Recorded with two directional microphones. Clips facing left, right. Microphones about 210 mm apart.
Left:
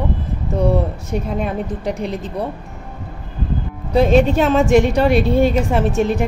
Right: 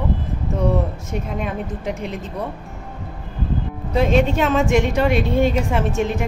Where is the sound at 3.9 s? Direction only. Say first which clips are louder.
Left 4 dB; 35° left (ahead or behind).